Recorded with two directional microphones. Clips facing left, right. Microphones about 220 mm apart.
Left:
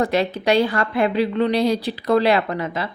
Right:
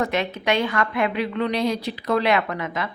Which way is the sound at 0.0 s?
35° left (ahead or behind).